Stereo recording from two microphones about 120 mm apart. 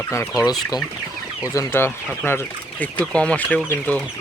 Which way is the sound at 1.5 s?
20° left (ahead or behind).